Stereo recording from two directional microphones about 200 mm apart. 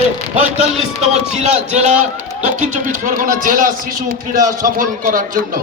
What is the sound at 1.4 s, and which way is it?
A man's voice, 35° right (ahead or behind).